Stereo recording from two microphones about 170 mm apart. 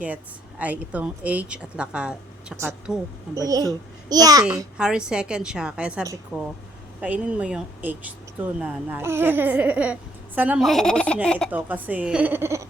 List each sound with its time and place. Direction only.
0.6 s speech: 10° right (ahead or behind)
3.3 s a child's voice: 20° right (ahead or behind)
4.8 s a woman's voice: 5° right (ahead or behind)
11.5 s speech: 10° right (ahead or behind)